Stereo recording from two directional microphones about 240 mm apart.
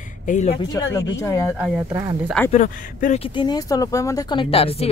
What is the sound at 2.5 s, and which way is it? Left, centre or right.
Speech, left.